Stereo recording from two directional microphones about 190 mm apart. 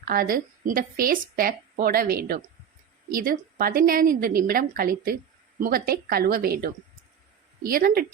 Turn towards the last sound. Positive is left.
turn(degrees=-50)  # may be behind; listen again after turning